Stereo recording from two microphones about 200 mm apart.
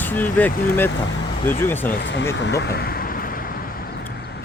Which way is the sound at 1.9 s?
60° left (ahead or behind).